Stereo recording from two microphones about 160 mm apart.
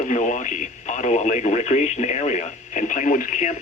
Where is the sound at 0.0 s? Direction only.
50° left (ahead or behind).